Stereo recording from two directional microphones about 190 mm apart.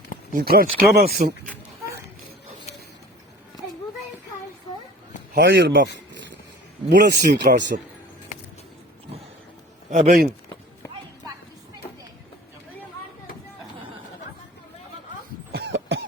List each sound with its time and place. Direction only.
0.3 s speech: 50° right (ahead or behind)
5.3 s speech: 65° right (ahead or behind)
6.9 s speech: 65° right (ahead or behind)
9.9 s speech: 35° right (ahead or behind)
15.5 s cough: 60° right (ahead or behind)